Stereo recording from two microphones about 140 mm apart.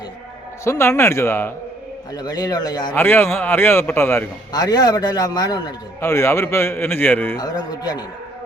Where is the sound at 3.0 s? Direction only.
15° left (ahead or behind).